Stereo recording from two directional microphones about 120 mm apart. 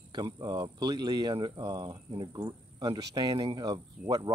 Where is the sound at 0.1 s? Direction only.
35° right (ahead or behind).